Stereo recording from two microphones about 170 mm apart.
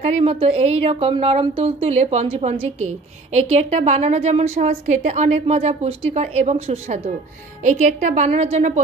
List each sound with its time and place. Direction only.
0.0 s a woman's voice: 35° right (ahead or behind)